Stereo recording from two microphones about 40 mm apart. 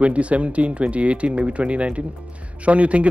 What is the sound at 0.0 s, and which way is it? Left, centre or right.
Speech, right.